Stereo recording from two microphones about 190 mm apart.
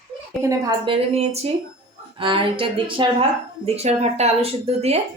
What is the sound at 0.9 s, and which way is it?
A woman's voice, 35° right (ahead or behind).